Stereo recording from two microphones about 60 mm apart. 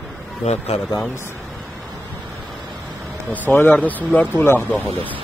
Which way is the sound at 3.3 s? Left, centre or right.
Left.